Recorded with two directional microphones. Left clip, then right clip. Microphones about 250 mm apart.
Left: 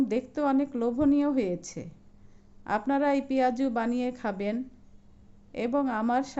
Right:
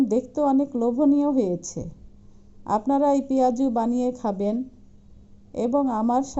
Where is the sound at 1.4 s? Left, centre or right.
Centre.